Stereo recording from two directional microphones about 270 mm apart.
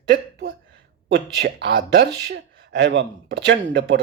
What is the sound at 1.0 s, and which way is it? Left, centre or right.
Speech, right.